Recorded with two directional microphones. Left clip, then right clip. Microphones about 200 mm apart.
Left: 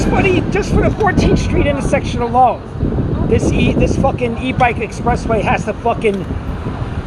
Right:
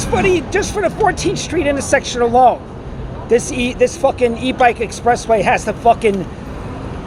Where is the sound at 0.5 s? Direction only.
25° right (ahead or behind).